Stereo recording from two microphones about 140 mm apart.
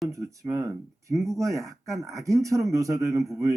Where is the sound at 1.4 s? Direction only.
20° right (ahead or behind).